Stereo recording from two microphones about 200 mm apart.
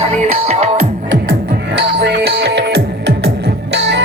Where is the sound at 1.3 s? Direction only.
55° right (ahead or behind).